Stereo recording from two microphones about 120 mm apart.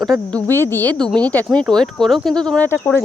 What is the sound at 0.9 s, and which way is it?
Speech, 5° left (ahead or behind).